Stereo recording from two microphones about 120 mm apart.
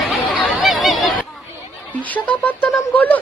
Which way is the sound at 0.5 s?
Centre (ahead or behind).